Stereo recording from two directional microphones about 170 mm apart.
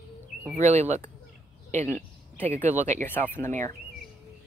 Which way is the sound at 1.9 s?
10° left (ahead or behind).